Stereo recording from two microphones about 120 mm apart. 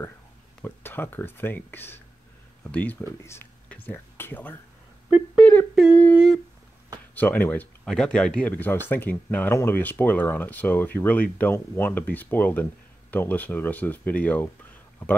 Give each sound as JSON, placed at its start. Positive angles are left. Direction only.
{"t": 0.6, "sound": "speech", "side_deg": 15}
{"t": 5.4, "sound": "humming", "side_deg": 15}
{"t": 6.1, "sound": "humming", "side_deg": 0}
{"t": 7.2, "sound": "speech", "side_deg": 15}